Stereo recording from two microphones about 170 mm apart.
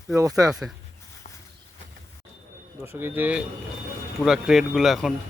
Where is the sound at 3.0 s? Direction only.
10° right (ahead or behind).